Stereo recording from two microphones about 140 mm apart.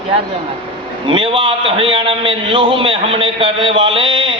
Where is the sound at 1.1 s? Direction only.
40° right (ahead or behind).